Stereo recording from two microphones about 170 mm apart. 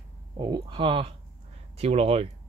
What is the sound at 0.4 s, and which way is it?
Speech, 25° right (ahead or behind).